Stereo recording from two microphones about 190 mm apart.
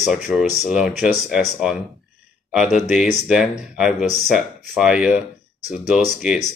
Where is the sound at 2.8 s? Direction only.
5° right (ahead or behind).